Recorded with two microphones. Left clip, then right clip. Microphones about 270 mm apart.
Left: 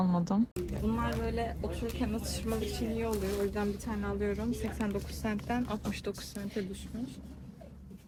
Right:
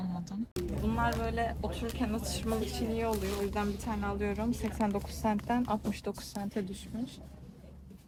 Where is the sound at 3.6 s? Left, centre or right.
Centre.